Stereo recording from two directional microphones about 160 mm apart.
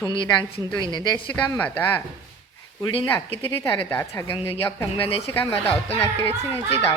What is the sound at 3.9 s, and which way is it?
Speech, 15° left (ahead or behind).